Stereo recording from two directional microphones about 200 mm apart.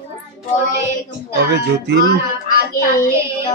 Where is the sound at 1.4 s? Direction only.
55° right (ahead or behind).